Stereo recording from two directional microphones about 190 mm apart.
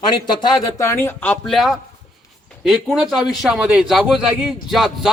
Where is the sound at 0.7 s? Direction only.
10° left (ahead or behind).